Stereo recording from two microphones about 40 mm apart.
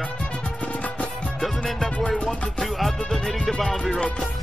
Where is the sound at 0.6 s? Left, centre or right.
Left.